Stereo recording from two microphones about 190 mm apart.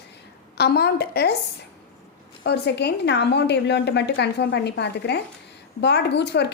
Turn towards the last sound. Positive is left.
turn(degrees=65)  # may be behind; listen again after turning